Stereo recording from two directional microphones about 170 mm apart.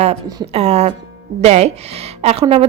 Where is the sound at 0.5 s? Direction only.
40° right (ahead or behind).